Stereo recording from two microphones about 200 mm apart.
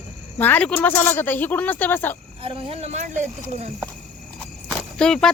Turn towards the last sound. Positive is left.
turn(degrees=5)  # may be behind; listen again after turning